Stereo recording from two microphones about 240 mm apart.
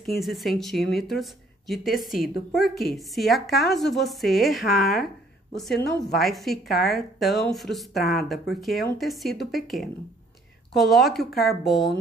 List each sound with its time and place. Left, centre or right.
0.2 s a woman's voice: centre